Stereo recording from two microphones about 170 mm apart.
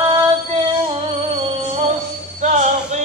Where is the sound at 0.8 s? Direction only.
35° right (ahead or behind).